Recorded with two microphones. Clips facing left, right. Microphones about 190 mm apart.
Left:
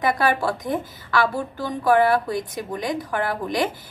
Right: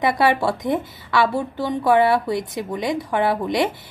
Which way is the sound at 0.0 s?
25° right (ahead or behind).